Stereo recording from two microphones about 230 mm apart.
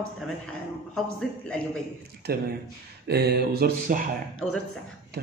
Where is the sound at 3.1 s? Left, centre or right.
Right.